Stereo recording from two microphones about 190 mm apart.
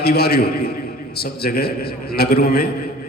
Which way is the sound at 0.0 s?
55° left (ahead or behind).